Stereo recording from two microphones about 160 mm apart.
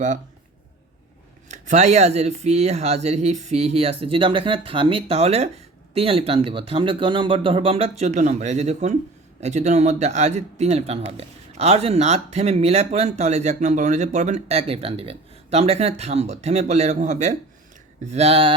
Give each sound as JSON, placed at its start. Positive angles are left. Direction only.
{"t": 1.5, "sound": "a man's voice", "side_deg": -50}